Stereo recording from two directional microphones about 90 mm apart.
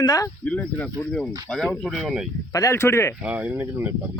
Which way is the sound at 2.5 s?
40° left (ahead or behind).